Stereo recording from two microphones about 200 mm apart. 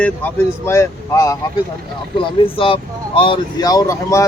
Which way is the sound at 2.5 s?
25° left (ahead or behind).